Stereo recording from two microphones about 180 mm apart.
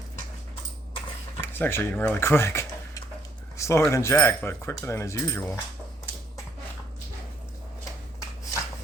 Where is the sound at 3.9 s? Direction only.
15° left (ahead or behind).